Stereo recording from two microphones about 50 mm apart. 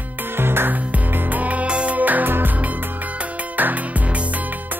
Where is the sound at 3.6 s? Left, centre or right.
Right.